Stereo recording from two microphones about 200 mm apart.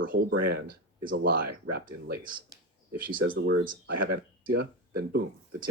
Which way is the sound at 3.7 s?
55° right (ahead or behind).